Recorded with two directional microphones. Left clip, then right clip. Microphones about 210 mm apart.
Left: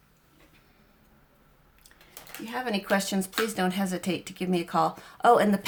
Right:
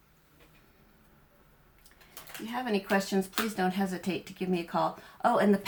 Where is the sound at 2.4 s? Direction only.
40° left (ahead or behind).